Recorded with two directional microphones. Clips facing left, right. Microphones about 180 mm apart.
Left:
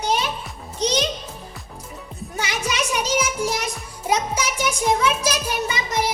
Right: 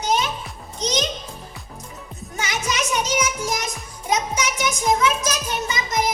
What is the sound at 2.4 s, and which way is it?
Music, 30° left (ahead or behind).